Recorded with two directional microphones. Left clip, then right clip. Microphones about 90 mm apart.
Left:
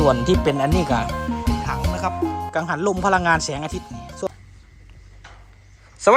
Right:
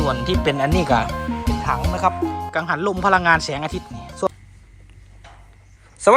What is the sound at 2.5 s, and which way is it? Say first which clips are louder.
A woman's voice: right 1 dB; 45° left (ahead or behind).